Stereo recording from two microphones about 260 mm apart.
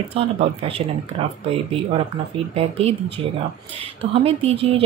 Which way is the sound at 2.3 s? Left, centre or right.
Right.